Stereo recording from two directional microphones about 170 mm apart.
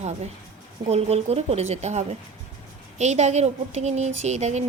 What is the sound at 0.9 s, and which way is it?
Speech, 40° right (ahead or behind).